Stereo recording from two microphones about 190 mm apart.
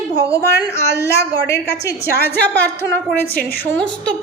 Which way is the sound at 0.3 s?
15° left (ahead or behind).